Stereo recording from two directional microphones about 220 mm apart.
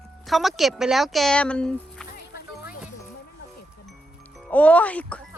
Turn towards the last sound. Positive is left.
turn(degrees=5)  # may be behind; listen again after turning